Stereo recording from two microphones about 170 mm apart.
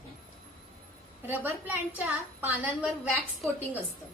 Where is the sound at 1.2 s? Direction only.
10° right (ahead or behind).